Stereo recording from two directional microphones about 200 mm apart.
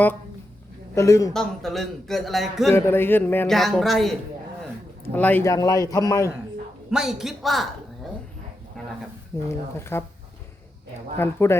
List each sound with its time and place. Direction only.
0.9 s a man's voice: 15° left (ahead or behind)
1.3 s a man's voice: centre (ahead or behind)
2.6 s a man's voice: 10° left (ahead or behind)
6.9 s a man's voice: centre (ahead or behind)
8.8 s a sound: centre (ahead or behind)
9.7 s a man's voice: 10° left (ahead or behind)
11.2 s a man's voice: 10° left (ahead or behind)